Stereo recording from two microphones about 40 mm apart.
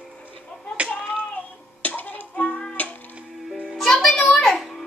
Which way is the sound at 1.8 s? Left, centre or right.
Left.